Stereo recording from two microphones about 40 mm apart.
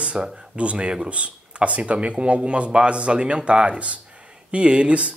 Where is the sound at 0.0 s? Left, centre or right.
Right.